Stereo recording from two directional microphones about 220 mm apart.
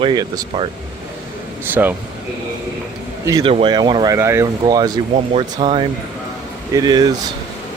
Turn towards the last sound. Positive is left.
turn(degrees=-20)  # may be behind; listen again after turning